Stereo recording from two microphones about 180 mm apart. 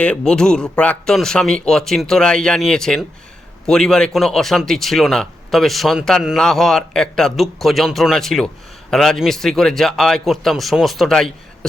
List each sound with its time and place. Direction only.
0.0 s speech: 5° left (ahead or behind)